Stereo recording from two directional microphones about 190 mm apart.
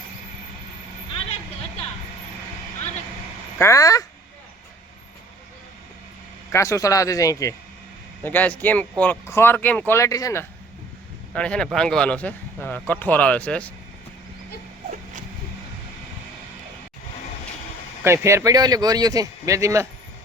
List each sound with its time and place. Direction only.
3.6 s speech: 15° left (ahead or behind)
6.5 s speech: 15° left (ahead or behind)
11.3 s speech: 5° left (ahead or behind)
18.0 s speech: 15° right (ahead or behind)